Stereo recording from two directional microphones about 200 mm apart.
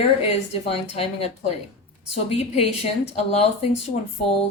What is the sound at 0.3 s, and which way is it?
Speech, 30° left (ahead or behind).